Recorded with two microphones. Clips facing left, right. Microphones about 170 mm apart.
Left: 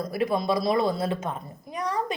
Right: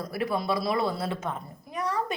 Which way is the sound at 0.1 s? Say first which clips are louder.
Left 3 dB; 15° left (ahead or behind).